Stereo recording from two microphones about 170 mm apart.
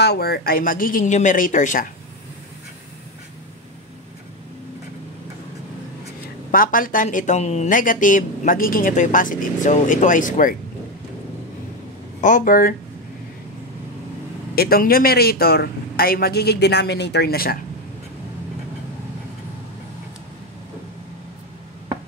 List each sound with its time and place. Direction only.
0.0 s a man's voice: 70° left (ahead or behind); by 1.9 s 50° left (ahead or behind)
6.5 s speech: 55° left (ahead or behind)
12.2 s speech: 50° left (ahead or behind)
14.5 s a man's voice: 65° left (ahead or behind)